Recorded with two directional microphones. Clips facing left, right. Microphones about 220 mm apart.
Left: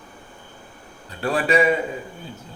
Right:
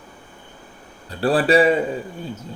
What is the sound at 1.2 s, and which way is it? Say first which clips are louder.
Speech: right 4 dB; 35° right (ahead or behind).